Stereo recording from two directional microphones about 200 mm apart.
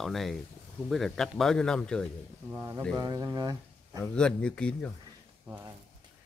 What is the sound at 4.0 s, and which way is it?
Speech, 5° left (ahead or behind).